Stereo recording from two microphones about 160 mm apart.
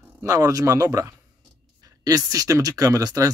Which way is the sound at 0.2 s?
20° right (ahead or behind).